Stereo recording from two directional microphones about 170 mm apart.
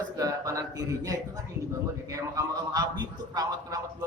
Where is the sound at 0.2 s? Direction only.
20° right (ahead or behind).